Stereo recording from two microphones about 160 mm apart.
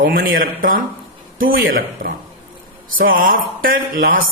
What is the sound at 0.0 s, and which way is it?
Mantra, 60° right (ahead or behind).